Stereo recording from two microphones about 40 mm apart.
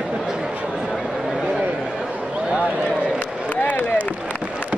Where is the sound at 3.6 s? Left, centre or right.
Left.